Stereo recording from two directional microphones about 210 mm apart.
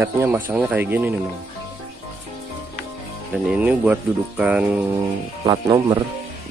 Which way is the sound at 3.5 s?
5° right (ahead or behind).